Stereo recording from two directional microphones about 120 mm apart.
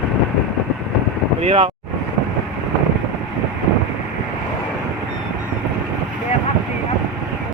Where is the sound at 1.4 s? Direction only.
55° right (ahead or behind).